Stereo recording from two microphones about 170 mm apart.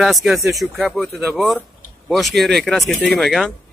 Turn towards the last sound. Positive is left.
turn(degrees=0)  # may be behind; listen again after turning